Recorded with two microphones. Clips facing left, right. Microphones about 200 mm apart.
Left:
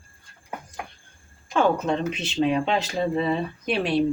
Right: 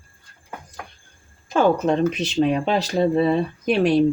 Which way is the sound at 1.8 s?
40° right (ahead or behind).